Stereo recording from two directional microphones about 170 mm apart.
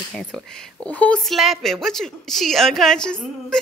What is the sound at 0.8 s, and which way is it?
A woman's voice, 10° left (ahead or behind).